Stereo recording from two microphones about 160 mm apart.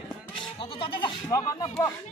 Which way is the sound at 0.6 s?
35° left (ahead or behind).